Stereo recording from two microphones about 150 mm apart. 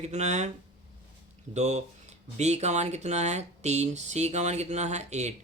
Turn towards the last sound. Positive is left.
turn(degrees=-50)  # may be behind; listen again after turning